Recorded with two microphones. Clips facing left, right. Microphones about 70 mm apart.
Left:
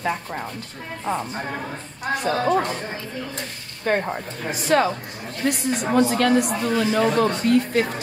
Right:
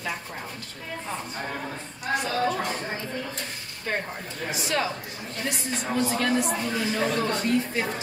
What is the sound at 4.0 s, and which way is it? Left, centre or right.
Speech, left.